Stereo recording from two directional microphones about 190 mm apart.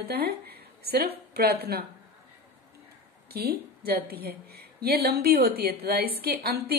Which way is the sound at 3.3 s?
55° right (ahead or behind).